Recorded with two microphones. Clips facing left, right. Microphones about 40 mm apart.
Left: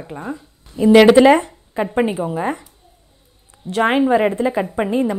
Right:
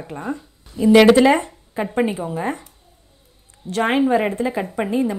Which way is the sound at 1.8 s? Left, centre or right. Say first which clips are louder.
Left 2 dB; centre.